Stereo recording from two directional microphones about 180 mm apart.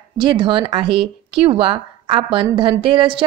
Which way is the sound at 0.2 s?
25° right (ahead or behind).